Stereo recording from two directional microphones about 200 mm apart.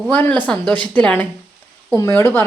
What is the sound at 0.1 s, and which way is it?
Speech, 10° left (ahead or behind).